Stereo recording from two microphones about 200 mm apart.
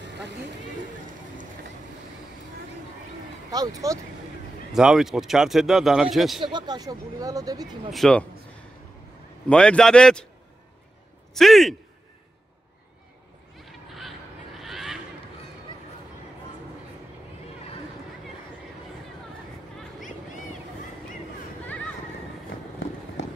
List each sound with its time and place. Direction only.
3.5 s speech: 20° right (ahead or behind)
4.7 s speech: centre (ahead or behind)
6.4 s speech: 20° right (ahead or behind)
7.9 s speech: 5° left (ahead or behind)
9.5 s speech: 5° left (ahead or behind)
11.3 s speech: centre (ahead or behind)
13.7 s a sound: centre (ahead or behind)
23.2 s a sound: 60° left (ahead or behind)